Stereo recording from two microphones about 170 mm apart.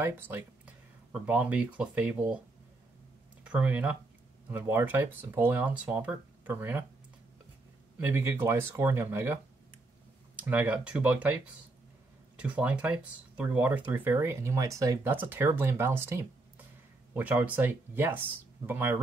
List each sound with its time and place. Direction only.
0.0 s speech: 15° right (ahead or behind)
3.4 s speech: 10° right (ahead or behind)
8.1 s speech: 15° right (ahead or behind)
10.4 s speech: 10° right (ahead or behind)